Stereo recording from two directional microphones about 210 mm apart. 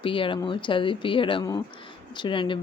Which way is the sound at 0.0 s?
25° left (ahead or behind).